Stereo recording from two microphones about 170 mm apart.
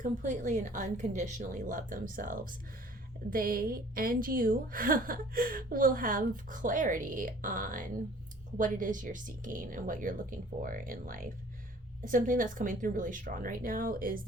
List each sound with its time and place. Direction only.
0.0 s a woman's voice: 45° right (ahead or behind)